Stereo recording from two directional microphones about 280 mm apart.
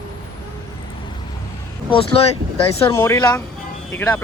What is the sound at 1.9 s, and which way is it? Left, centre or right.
Speech, centre.